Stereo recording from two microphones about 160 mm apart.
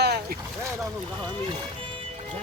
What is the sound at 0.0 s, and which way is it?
Boat, 90° right.